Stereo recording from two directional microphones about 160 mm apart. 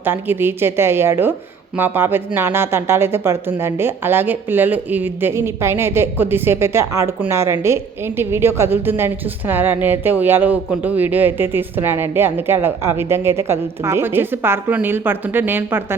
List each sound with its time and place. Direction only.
0.0 s speech: 15° right (ahead or behind)